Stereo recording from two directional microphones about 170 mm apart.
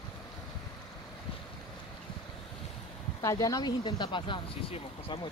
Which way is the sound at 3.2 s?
20° left (ahead or behind).